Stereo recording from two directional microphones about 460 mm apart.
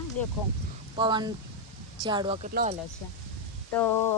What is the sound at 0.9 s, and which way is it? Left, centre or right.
Speech, centre.